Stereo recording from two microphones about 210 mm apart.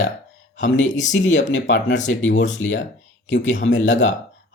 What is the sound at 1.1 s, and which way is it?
Speech, 60° left (ahead or behind).